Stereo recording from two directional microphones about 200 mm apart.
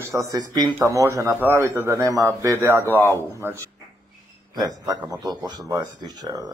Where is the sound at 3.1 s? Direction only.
10° right (ahead or behind).